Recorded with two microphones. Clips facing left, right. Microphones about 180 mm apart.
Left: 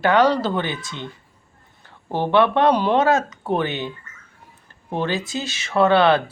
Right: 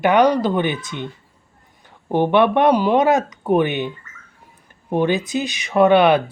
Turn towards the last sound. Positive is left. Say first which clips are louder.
# right 3 dB
turn(degrees=-15)  # may be behind; listen again after turning